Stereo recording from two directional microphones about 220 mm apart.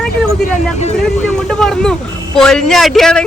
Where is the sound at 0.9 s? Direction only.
5° left (ahead or behind).